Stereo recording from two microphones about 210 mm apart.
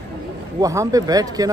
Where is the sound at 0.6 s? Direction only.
15° right (ahead or behind).